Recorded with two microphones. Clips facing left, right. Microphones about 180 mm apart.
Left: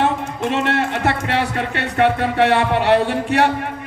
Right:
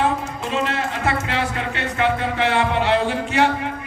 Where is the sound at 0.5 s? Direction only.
65° left (ahead or behind).